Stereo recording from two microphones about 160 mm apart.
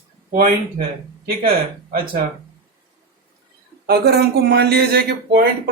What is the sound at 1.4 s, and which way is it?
Speech, 65° right (ahead or behind).